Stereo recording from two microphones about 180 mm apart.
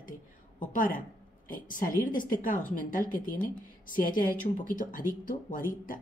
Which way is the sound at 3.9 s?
50° left (ahead or behind).